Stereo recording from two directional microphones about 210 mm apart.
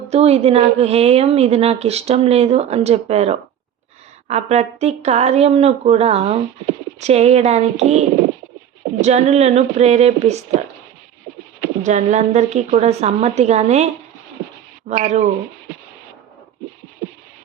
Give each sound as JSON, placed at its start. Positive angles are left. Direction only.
{"t": 0.1, "sound": "a woman's voice", "side_deg": -30}
{"t": 11.9, "sound": "speech", "side_deg": -35}